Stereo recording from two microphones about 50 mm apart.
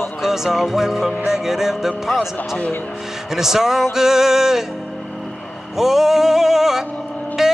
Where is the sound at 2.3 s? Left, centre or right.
Left.